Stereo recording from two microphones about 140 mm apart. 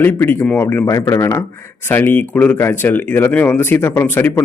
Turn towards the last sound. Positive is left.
turn(degrees=15)  # may be behind; listen again after turning